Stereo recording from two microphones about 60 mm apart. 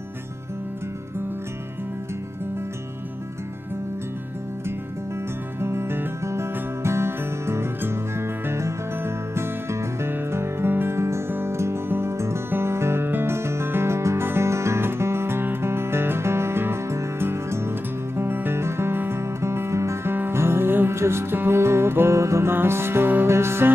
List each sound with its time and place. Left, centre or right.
5.6 s music: right
22.5 s music: right